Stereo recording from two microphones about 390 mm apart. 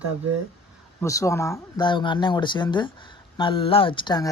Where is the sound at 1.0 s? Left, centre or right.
Centre.